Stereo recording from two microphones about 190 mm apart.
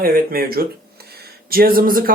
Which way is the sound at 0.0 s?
50° right (ahead or behind).